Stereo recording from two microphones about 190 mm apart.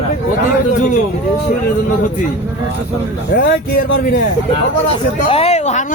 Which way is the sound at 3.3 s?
50° left (ahead or behind).